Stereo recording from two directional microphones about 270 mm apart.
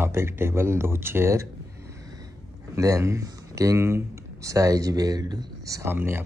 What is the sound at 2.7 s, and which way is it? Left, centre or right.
Speech, centre.